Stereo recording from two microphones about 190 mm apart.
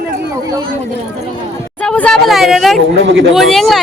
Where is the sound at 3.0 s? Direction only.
80° right.